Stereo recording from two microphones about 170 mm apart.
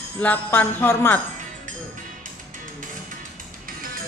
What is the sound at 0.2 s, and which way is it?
Jingle bell, 10° left (ahead or behind).